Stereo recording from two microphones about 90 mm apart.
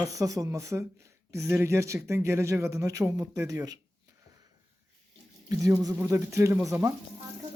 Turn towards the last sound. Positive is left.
turn(degrees=-35)  # may be behind; listen again after turning